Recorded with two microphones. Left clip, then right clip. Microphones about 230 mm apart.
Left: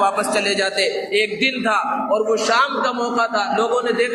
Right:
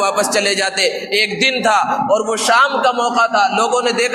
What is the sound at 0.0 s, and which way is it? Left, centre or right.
A man's voice, right.